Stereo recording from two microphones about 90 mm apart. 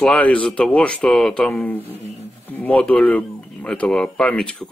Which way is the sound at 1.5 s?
20° left (ahead or behind).